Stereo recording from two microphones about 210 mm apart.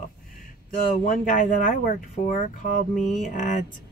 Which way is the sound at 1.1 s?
40° left (ahead or behind).